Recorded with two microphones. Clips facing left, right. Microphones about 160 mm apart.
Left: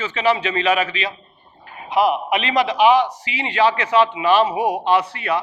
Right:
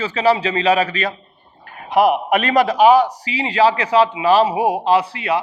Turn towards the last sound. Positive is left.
turn(degrees=-30)  # may be behind; listen again after turning